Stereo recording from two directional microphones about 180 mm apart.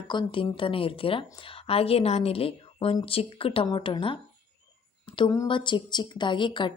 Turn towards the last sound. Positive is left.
turn(degrees=25)  # may be behind; listen again after turning